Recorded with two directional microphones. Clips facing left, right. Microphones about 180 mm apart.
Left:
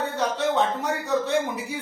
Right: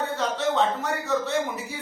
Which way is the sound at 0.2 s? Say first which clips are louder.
Left 1 dB; 15° left (ahead or behind).